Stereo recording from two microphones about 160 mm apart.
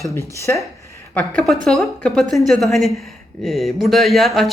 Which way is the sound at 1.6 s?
Centre (ahead or behind).